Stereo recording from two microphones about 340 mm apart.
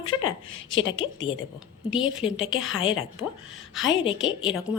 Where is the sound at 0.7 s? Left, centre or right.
Left.